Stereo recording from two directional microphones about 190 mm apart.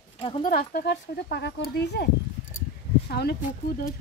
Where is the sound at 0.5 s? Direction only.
55° left (ahead or behind).